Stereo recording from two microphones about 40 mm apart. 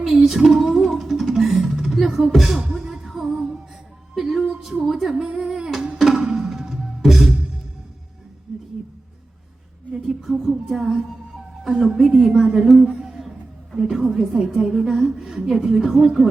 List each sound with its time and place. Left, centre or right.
0.3 s a woman's voice: centre
0.5 s music: centre
2.3 s a woman's voice: centre
2.7 s music: centre
4.1 s a woman's voice: centre
5.4 s music: centre
6.0 s a sound: centre
6.3 s music: centre
8.5 s a sound: centre
10.2 s a woman's voice: centre
12.8 s a sound: centre
13.7 s a woman's voice: centre